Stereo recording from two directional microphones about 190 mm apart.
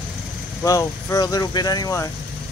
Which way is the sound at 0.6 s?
15° left (ahead or behind).